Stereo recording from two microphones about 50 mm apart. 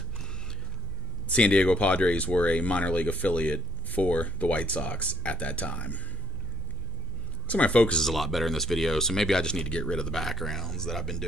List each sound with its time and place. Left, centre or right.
1.2 s speech: left
7.4 s speech: left
8.0 s speech: centre
10.1 s speech: centre